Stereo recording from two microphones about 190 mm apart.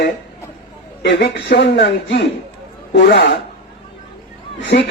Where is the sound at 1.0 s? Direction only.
65° left (ahead or behind).